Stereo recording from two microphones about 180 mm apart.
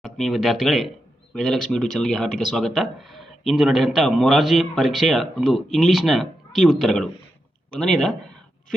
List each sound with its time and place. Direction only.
0.0 s speech: centre (ahead or behind)